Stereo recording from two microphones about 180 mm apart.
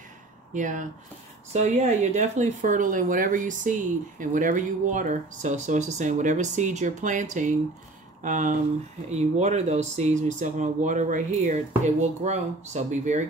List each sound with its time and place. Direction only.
0.5 s speech: 45° right (ahead or behind)